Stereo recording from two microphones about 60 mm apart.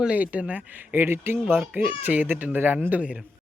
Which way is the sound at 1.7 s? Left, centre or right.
Right.